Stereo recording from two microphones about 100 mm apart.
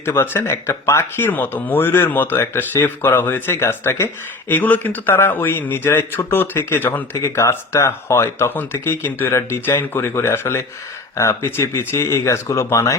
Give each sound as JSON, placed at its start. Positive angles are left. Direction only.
{"t": 0.0, "sound": "speech", "side_deg": 25}